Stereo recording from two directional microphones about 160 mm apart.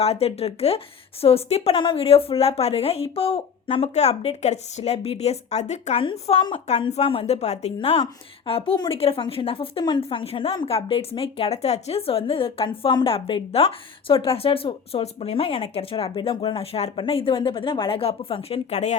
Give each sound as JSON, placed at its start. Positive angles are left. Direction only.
{"t": 0.0, "sound": "a woman's voice", "side_deg": 40}